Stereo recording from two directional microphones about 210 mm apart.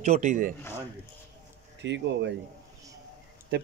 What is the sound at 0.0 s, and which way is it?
Speech, 35° right (ahead or behind).